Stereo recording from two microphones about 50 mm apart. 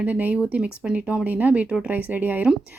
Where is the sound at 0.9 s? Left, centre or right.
Right.